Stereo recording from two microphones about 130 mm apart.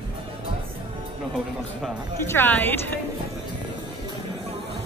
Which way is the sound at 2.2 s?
15° left (ahead or behind).